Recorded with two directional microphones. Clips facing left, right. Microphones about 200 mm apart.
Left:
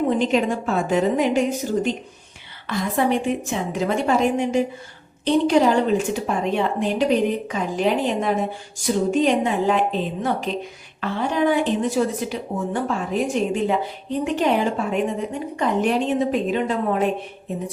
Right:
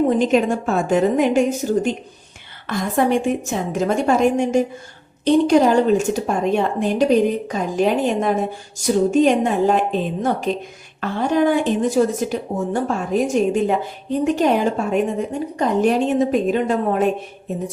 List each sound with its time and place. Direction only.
0.2 s a woman's voice: 45° right (ahead or behind)